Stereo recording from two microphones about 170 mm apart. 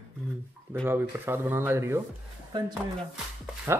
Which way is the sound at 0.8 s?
10° right (ahead or behind).